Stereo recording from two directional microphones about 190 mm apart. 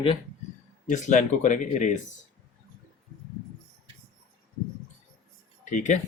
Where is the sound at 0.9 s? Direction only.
40° left (ahead or behind).